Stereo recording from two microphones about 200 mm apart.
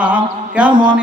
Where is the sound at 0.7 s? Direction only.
25° right (ahead or behind).